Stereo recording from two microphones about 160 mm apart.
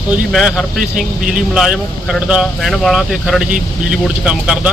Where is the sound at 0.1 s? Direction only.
Centre (ahead or behind).